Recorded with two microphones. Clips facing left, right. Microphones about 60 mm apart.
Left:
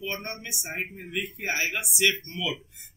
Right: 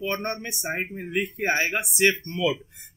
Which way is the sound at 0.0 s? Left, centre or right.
Right.